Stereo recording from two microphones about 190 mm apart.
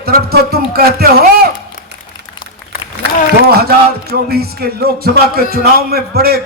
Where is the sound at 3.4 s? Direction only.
55° right (ahead or behind).